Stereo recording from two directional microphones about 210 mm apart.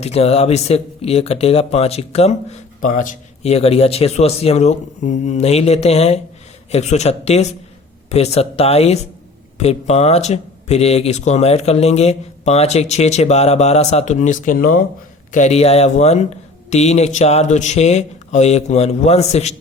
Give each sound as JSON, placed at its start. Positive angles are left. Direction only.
{"t": 0.0, "sound": "speech", "side_deg": 30}